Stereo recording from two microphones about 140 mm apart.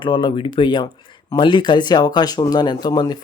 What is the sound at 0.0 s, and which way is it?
Speech, 35° left (ahead or behind).